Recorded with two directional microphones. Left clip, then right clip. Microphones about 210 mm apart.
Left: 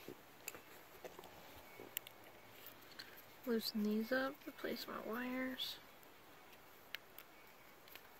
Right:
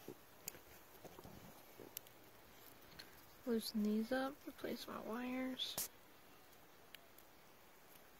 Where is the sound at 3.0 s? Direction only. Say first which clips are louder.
Left 4 dB; 30° right (ahead or behind).